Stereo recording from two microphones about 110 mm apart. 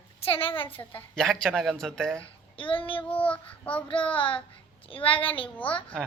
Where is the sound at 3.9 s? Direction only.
55° left (ahead or behind).